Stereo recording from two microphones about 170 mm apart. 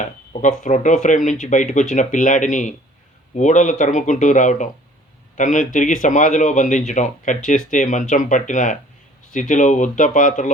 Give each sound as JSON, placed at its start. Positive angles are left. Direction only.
{"t": 0.6, "sound": "speech", "side_deg": 45}